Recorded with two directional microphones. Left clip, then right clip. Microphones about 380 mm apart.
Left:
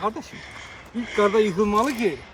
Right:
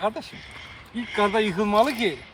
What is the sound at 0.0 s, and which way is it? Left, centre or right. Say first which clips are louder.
Speech: even; centre.